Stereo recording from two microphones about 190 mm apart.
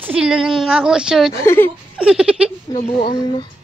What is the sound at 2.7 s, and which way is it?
Speech, 30° left (ahead or behind).